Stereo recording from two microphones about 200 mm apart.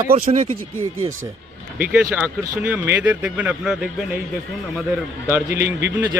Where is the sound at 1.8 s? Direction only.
5° right (ahead or behind).